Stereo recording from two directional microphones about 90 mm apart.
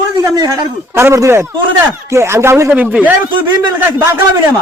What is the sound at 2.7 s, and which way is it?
Speech, 20° right (ahead or behind).